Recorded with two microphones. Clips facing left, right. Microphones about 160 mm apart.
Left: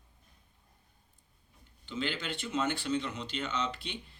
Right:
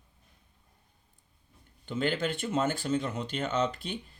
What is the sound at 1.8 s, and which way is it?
Speech, 50° right (ahead or behind).